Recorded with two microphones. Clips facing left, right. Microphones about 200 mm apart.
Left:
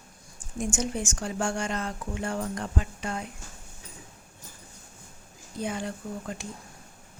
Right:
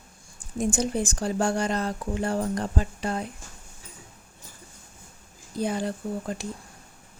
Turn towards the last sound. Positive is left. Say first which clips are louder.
# right 5 dB
turn(degrees=-35)  # may be behind; listen again after turning